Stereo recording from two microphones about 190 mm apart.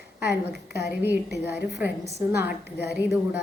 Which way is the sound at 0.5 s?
55° left (ahead or behind).